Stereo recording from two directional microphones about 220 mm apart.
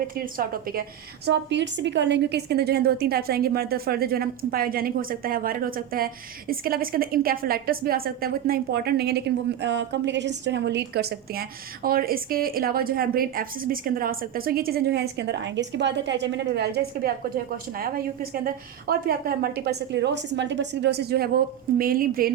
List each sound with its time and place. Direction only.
0.2 s a woman's voice: 40° right (ahead or behind)